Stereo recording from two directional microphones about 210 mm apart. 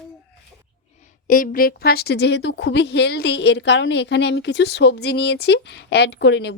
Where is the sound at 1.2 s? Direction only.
40° left (ahead or behind).